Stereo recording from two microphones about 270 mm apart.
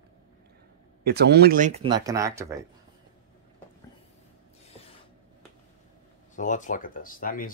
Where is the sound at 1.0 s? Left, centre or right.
Right; by 2.6 s centre.